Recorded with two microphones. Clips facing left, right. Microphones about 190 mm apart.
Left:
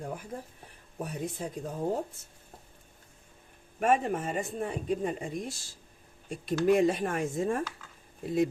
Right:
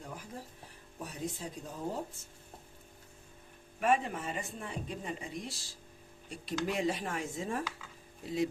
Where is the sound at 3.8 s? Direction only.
45° left (ahead or behind).